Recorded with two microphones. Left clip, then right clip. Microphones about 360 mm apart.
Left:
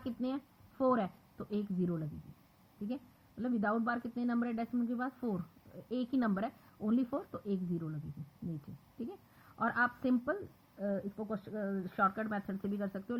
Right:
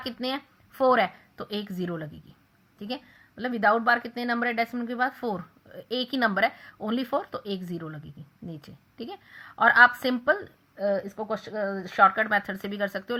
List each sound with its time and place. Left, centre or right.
0.3 s a woman's voice: centre
9.6 s a woman's voice: centre